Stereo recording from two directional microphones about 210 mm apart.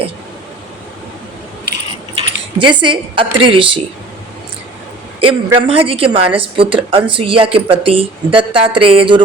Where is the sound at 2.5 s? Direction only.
25° right (ahead or behind).